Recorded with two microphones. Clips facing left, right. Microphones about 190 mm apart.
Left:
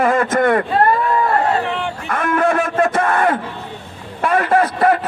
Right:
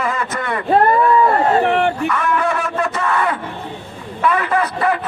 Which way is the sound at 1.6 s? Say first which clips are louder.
Right 7 dB; 60° right (ahead or behind).